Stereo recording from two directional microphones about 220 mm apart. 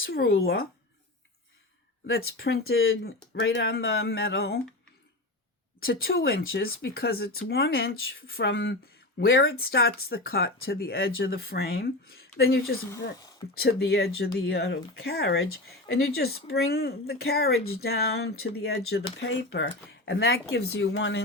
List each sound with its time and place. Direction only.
0.4 s speech: 45° left (ahead or behind)
2.0 s speech: 45° left (ahead or behind)
5.8 s speech: 40° left (ahead or behind); by 9.4 s 60° left (ahead or behind)
9.4 s speech: 45° left (ahead or behind)